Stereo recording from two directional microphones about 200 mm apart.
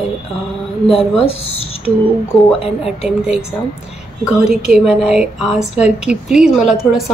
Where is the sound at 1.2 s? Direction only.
30° left (ahead or behind).